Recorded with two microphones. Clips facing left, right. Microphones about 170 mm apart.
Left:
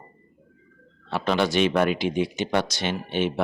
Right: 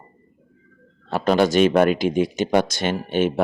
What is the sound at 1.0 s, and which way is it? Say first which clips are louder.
Speech: right 5 dB; 45° right (ahead or behind).